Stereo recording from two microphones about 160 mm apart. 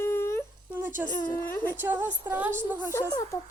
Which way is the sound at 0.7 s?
10° right (ahead or behind).